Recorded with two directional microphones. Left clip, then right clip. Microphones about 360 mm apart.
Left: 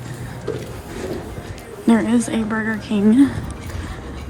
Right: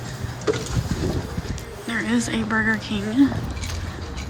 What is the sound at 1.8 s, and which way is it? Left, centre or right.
A woman's voice, centre.